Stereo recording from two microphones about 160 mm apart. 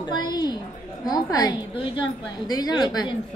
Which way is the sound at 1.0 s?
25° left (ahead or behind).